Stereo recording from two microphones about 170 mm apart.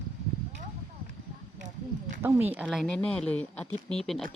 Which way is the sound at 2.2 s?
15° right (ahead or behind).